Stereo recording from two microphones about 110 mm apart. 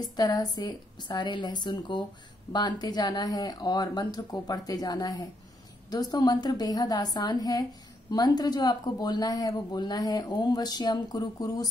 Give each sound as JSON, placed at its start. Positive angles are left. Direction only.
{"t": 0.1, "sound": "speech", "side_deg": 35}